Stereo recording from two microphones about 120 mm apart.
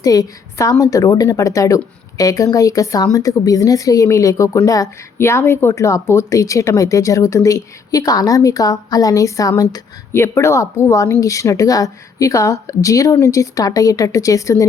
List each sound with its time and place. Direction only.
0.0 s a woman's voice: 30° left (ahead or behind)